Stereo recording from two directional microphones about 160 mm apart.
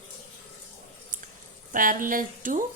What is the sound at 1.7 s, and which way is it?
Speech, 55° right (ahead or behind).